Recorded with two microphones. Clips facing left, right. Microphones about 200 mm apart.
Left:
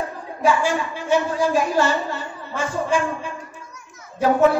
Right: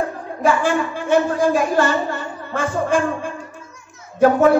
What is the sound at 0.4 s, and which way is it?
A woman's voice, 55° right (ahead or behind).